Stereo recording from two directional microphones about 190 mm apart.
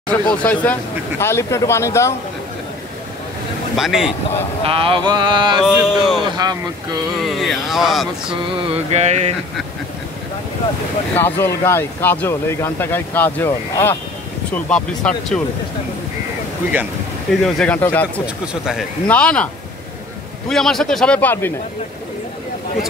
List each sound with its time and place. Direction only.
0.1 s speech: 10° left (ahead or behind)
3.7 s speech: centre (ahead or behind)
4.6 s a sound: 30° right (ahead or behind)
5.6 s speech: 5° right (ahead or behind)
6.3 s a sound: 20° right (ahead or behind)
7.2 s speech: centre (ahead or behind)
8.7 s mantra: 35° right (ahead or behind)
11.1 s speech: 10° left (ahead or behind)
17.6 s speech: 10° left (ahead or behind)
18.2 s speech: 5° right (ahead or behind)
19.0 s speech: 5° left (ahead or behind)